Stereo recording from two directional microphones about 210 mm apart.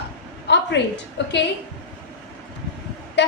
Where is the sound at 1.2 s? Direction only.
55° left (ahead or behind).